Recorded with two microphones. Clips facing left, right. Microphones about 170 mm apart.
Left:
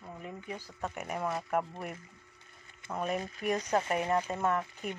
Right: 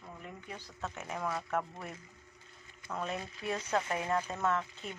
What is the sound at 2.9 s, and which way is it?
Speech, 15° left (ahead or behind).